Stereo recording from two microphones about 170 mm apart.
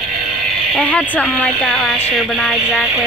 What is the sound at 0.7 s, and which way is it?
Speech, 5° left (ahead or behind).